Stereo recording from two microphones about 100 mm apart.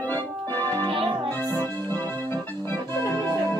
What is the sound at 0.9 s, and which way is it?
Music, 65° right (ahead or behind).